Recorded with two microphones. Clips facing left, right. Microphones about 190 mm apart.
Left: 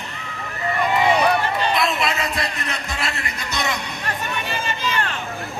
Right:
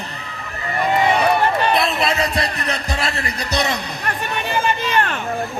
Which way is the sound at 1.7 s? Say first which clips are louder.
Right 3 dB; 35° right (ahead or behind).